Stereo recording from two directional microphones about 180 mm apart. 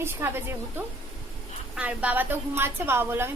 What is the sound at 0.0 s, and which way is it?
Speech, 15° right (ahead or behind).